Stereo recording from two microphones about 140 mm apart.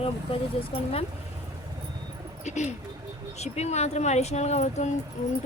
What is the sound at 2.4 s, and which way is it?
Speech, 55° left (ahead or behind).